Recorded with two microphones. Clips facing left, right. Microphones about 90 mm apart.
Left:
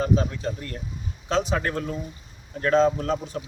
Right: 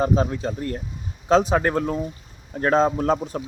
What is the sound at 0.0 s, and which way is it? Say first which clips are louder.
Speech: right 3 dB; 30° right (ahead or behind).